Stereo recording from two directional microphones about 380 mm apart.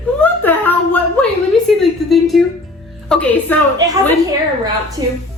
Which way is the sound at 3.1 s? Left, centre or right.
Centre.